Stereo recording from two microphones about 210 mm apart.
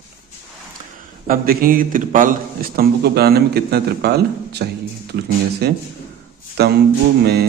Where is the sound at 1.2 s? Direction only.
45° right (ahead or behind).